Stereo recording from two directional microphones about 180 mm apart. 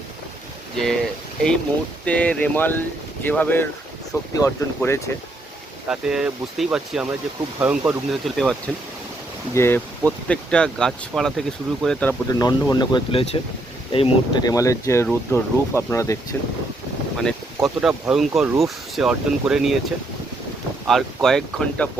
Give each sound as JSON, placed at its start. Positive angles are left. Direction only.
{"t": 0.8, "sound": "speech", "side_deg": 0}
{"t": 5.9, "sound": "speech", "side_deg": -5}
{"t": 9.6, "sound": "speech", "side_deg": 10}
{"t": 12.3, "sound": "speech", "side_deg": 20}
{"t": 20.8, "sound": "speech", "side_deg": 0}